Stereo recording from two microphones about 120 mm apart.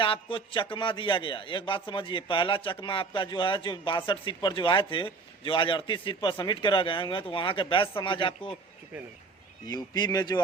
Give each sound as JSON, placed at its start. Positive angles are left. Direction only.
{"t": 0.0, "sound": "a man's voice", "side_deg": 45}
{"t": 9.6, "sound": "speech", "side_deg": 35}